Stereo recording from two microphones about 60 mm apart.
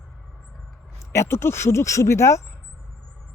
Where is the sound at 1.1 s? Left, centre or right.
Left.